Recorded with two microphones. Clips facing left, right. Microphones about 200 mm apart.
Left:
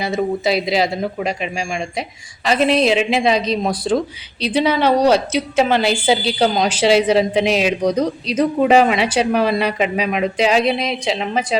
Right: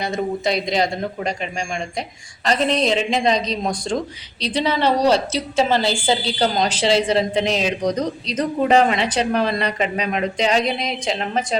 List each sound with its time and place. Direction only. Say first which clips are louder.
0.0 s a man's voice: left 3 dB; 5° left (ahead or behind)
5.5 s a woman's voice: left 2 dB; 60° left (ahead or behind)
6.1 s a woman's voice: left 5 dB; 5° left (ahead or behind)